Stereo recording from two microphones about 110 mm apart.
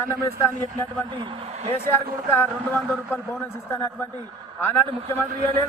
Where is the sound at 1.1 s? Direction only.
50° right (ahead or behind); by 1.7 s 75° right (ahead or behind).